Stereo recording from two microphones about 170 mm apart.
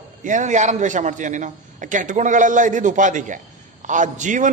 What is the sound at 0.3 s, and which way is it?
A man's voice, 45° right (ahead or behind).